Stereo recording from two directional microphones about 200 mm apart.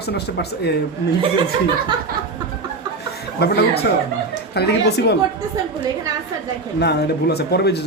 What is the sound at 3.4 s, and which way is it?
A man's voice, 55° left (ahead or behind).